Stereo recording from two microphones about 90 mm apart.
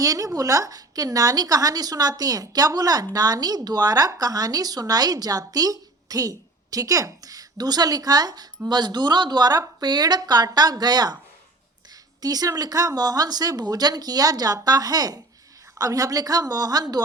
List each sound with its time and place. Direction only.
0.0 s a woman's voice: 40° right (ahead or behind)
12.2 s a woman's voice: 45° right (ahead or behind)